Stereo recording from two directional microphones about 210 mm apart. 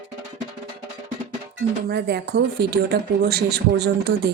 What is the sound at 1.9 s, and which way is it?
Speech, 50° right (ahead or behind).